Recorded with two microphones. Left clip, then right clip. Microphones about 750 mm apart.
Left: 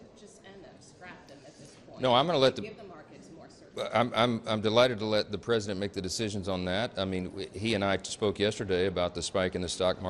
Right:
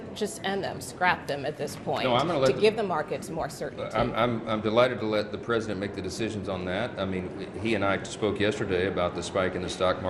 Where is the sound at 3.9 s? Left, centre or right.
Left.